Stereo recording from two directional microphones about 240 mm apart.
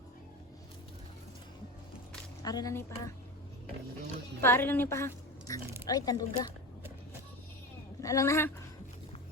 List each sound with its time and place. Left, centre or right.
2.4 s speech: centre
4.4 s a woman's voice: centre
8.0 s speech: centre